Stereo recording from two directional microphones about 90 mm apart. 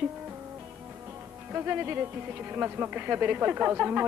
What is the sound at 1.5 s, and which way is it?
Speech, 20° right (ahead or behind).